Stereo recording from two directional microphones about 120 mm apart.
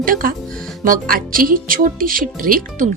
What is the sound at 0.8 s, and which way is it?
Speech, 90° right.